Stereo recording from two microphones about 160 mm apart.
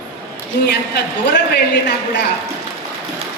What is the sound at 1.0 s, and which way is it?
Speech, 90° left.